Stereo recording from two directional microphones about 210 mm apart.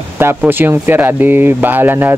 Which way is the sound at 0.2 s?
10° right (ahead or behind).